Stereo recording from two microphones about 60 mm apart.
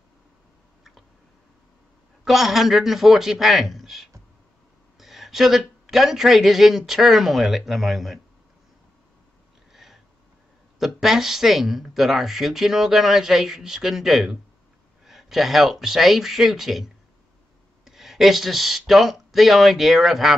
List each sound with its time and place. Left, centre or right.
2.2 s a man's voice: centre
9.7 s a sound: centre
10.8 s speech: centre